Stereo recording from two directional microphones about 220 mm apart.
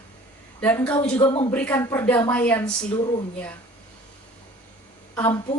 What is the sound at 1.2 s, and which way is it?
Speech, 25° left (ahead or behind).